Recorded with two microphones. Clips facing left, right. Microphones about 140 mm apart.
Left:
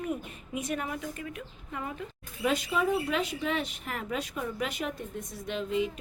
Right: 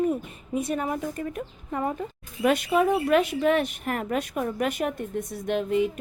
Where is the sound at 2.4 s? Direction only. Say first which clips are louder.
Right 6 dB; 60° right (ahead or behind).